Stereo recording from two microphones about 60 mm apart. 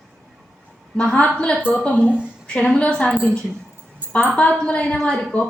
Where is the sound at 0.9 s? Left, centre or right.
Centre.